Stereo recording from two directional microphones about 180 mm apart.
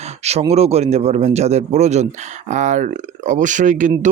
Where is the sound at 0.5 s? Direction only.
35° right (ahead or behind).